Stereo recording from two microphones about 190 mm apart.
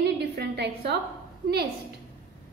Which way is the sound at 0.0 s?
60° right (ahead or behind).